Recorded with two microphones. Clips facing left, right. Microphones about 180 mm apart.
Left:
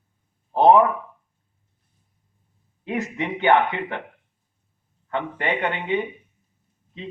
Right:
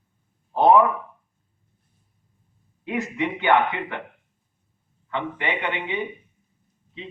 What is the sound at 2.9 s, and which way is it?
Speech, 40° left (ahead or behind).